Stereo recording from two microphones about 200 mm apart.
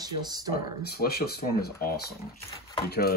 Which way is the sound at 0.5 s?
50° left (ahead or behind).